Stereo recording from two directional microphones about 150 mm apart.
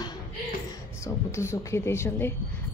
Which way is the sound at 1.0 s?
20° left (ahead or behind).